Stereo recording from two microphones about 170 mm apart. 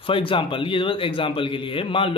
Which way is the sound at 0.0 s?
30° left (ahead or behind).